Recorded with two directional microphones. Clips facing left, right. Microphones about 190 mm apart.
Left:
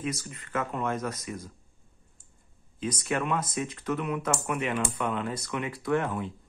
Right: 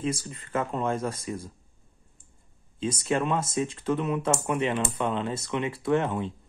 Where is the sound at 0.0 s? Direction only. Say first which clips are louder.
Right 3 dB; 30° right (ahead or behind).